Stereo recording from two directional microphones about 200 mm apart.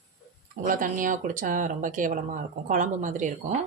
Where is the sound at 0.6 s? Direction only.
40° right (ahead or behind).